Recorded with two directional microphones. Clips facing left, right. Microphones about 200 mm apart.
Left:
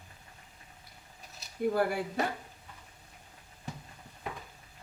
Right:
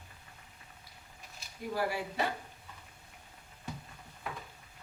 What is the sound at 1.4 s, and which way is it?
Speech, 50° left (ahead or behind).